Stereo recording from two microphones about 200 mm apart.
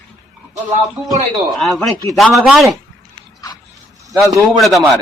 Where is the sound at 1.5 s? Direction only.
Centre (ahead or behind).